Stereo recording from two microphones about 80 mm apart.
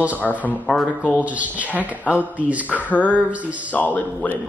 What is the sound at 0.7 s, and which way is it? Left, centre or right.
Speech, centre.